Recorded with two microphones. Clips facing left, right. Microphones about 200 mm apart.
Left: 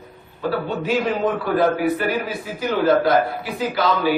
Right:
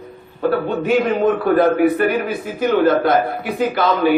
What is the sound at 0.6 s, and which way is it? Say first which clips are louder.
A man's voice: right 4 dB; 55° right (ahead or behind).